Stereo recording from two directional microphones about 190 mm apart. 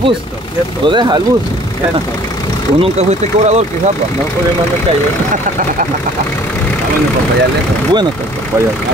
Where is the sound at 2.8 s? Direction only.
35° right (ahead or behind).